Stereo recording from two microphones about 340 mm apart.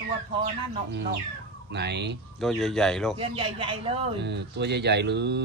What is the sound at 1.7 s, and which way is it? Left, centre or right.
Speech, right.